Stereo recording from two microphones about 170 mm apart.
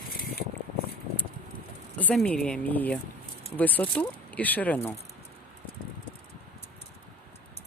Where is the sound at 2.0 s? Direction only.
10° left (ahead or behind).